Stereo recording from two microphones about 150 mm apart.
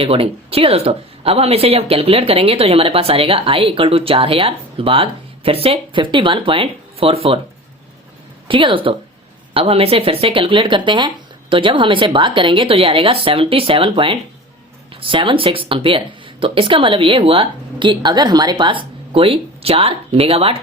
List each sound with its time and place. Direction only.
0.0 s speech: 40° right (ahead or behind)
8.4 s speech: 35° right (ahead or behind)